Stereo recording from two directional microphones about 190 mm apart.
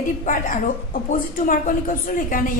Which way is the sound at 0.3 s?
45° left (ahead or behind).